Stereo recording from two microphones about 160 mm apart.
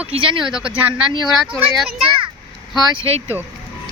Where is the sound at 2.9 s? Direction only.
35° right (ahead or behind).